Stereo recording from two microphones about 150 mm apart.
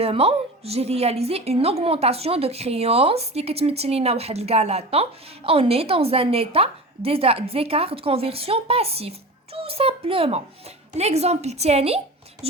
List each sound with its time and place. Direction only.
0.0 s a woman's voice: 40° right (ahead or behind)